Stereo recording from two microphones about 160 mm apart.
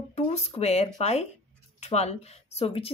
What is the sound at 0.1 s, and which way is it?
Speech, 45° left (ahead or behind).